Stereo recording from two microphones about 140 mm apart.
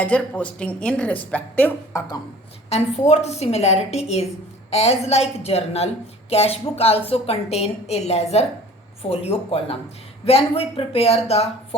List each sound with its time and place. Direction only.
0.0 s a woman's voice: 10° left (ahead or behind)
2.6 s a woman's voice: 50° left (ahead or behind)